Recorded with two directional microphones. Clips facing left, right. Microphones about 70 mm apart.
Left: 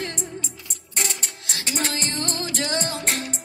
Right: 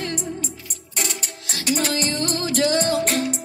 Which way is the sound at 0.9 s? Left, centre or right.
Left.